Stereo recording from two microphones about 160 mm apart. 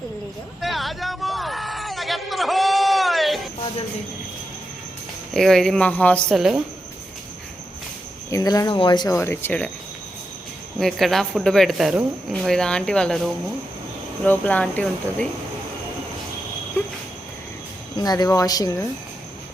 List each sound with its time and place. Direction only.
0.6 s a sound: centre (ahead or behind)
5.3 s speech: centre (ahead or behind)
6.3 s speech: 5° right (ahead or behind)
8.3 s speech: 20° left (ahead or behind)
10.8 s speech: centre (ahead or behind)
17.9 s speech: 25° left (ahead or behind)